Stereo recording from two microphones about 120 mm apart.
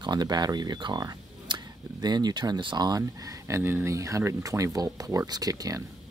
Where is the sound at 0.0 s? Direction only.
35° right (ahead or behind).